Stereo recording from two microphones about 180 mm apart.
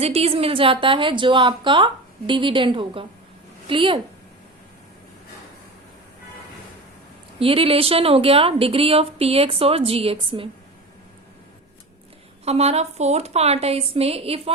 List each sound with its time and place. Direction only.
0.0 s a woman's voice: 35° right (ahead or behind)
7.3 s speech: 30° right (ahead or behind)
12.5 s speech: 35° right (ahead or behind)